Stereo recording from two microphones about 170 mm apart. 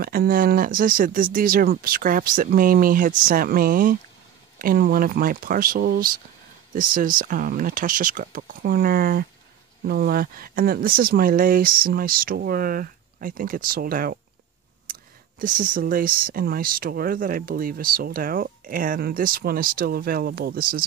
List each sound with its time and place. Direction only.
0.0 s speech: 60° right (ahead or behind)